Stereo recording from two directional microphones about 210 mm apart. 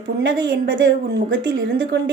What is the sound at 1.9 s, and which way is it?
Speech, 55° right (ahead or behind).